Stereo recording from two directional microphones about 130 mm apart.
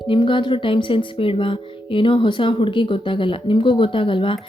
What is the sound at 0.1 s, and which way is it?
Speech, 40° left (ahead or behind).